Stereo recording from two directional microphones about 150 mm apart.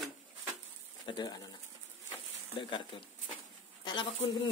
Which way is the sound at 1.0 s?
25° left (ahead or behind).